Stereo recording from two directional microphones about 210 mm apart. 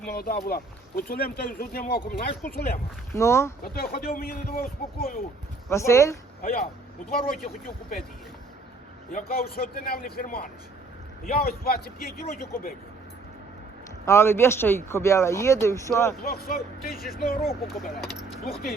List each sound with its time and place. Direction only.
0.1 s speech: 45° left (ahead or behind)
3.1 s speech: 15° left (ahead or behind)
3.6 s speech: 45° left (ahead or behind)
5.6 s speech: 15° left (ahead or behind)
6.4 s speech: 45° left (ahead or behind)
9.1 s speech: 45° left (ahead or behind)
14.0 s speech: 15° left (ahead or behind)
16.2 s speech: 45° left (ahead or behind)
17.7 s speech: centre (ahead or behind)